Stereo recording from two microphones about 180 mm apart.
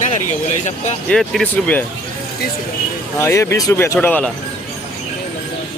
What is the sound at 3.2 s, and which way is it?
Speech, 15° left (ahead or behind).